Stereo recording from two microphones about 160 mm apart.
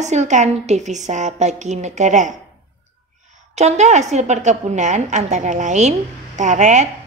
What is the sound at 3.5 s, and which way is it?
A woman's voice, 45° right (ahead or behind).